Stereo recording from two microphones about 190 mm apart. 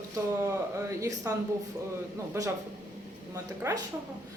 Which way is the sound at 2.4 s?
15° right (ahead or behind).